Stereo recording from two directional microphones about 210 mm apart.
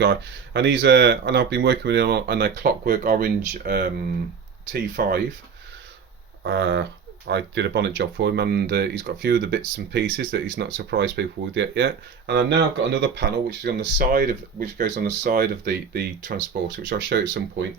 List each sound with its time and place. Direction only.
0.0 s speech: 55° right (ahead or behind)
6.4 s a sound: 55° right (ahead or behind)
7.3 s speech: 55° right (ahead or behind)